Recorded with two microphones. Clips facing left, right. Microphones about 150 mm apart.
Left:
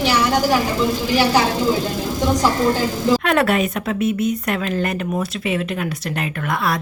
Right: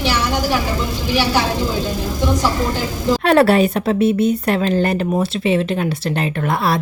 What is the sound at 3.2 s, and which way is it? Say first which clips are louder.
A woman's voice: right 5 dB; 35° right (ahead or behind).